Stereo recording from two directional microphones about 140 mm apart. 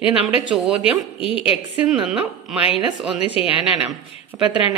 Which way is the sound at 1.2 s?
40° left (ahead or behind).